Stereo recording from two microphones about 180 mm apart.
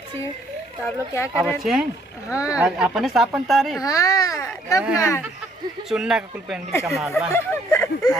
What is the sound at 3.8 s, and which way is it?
A child's voice, 20° left (ahead or behind).